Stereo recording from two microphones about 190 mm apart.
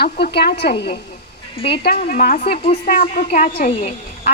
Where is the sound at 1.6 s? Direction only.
25° left (ahead or behind).